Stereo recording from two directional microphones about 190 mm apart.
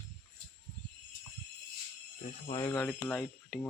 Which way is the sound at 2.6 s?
5° left (ahead or behind).